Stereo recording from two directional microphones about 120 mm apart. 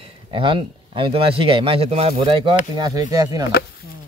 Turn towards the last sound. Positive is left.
turn(degrees=-30)  # may be behind; listen again after turning